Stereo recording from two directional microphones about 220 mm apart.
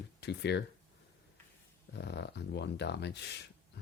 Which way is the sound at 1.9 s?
50° left (ahead or behind).